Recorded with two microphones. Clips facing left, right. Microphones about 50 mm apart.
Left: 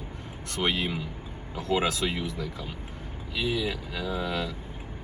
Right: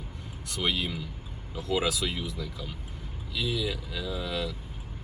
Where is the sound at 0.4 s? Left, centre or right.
Left.